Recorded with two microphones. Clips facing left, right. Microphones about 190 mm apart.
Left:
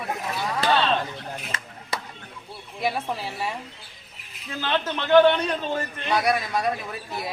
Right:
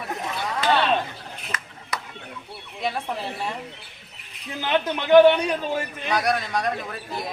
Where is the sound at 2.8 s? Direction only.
5° left (ahead or behind).